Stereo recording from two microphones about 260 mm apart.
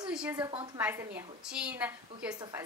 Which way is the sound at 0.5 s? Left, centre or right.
Centre.